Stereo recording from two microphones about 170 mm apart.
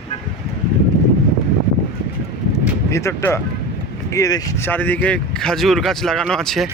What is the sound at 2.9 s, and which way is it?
Speech, 15° left (ahead or behind).